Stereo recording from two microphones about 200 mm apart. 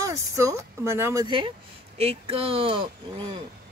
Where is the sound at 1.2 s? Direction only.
25° right (ahead or behind).